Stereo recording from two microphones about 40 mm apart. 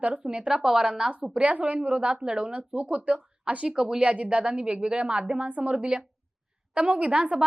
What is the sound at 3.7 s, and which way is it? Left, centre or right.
Speech, centre.